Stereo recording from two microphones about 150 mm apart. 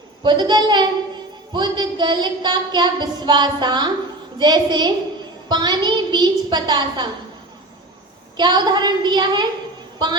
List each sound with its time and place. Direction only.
0.2 s child singing: 30° right (ahead or behind)
8.4 s child singing: 30° right (ahead or behind)